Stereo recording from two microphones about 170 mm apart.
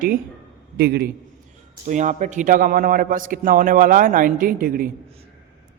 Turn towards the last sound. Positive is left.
turn(degrees=-55)  # may be behind; listen again after turning